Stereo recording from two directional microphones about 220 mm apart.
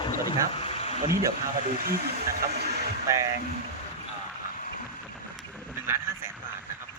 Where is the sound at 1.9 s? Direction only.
45° right (ahead or behind).